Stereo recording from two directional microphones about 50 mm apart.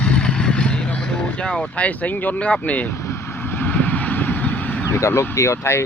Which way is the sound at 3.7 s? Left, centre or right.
Left.